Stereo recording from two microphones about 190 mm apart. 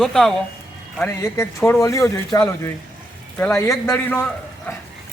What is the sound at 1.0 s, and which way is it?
Speech, 15° left (ahead or behind).